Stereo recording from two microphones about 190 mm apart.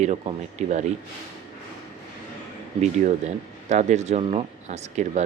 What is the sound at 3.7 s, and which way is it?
Speech, 35° right (ahead or behind).